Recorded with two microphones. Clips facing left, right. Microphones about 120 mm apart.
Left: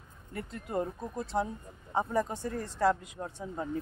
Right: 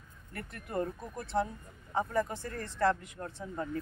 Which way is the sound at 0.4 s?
20° left (ahead or behind).